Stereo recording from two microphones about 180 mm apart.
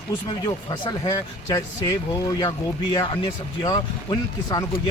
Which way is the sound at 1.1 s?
20° left (ahead or behind).